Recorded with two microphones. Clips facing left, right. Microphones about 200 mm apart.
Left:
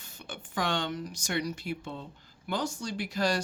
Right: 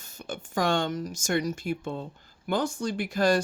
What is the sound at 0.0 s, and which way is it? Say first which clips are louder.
Speech: right 6 dB; 45° right (ahead or behind).